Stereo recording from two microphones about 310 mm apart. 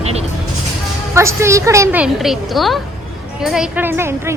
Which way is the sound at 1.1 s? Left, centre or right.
Centre.